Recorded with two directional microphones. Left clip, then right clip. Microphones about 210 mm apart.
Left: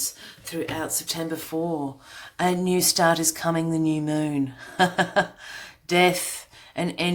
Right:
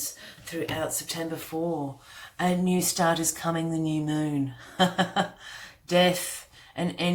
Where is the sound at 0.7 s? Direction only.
45° left (ahead or behind).